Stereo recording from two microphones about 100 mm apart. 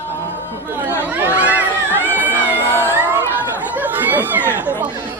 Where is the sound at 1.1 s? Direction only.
20° right (ahead or behind).